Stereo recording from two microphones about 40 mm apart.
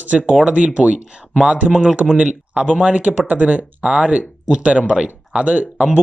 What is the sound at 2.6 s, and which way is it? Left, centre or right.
Speech, right.